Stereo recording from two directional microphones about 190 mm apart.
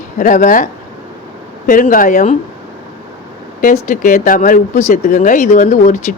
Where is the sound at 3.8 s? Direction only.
40° left (ahead or behind).